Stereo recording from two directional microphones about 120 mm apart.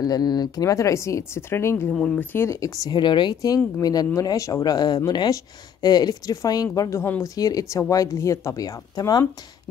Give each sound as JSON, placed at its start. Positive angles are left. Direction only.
{"t": 0.0, "sound": "speech", "side_deg": 35}
{"t": 1.9, "sound": "speech", "side_deg": 10}
{"t": 2.3, "sound": "speech", "side_deg": 25}